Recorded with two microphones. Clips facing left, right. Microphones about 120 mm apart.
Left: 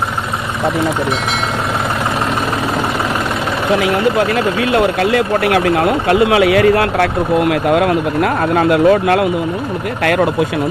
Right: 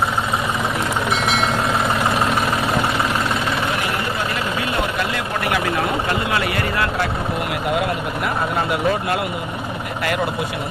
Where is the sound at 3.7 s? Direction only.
90° left.